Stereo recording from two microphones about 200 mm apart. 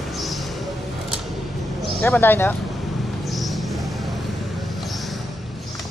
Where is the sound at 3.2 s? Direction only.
Centre (ahead or behind).